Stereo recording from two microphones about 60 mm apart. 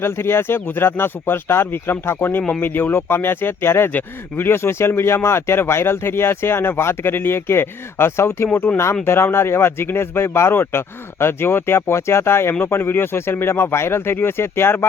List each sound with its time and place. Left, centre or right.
0.0 s speech: left
8.5 s speech: left
9.0 s speech: left